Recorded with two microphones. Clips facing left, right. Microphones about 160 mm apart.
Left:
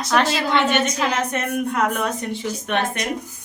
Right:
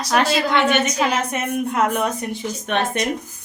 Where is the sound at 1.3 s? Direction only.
5° right (ahead or behind).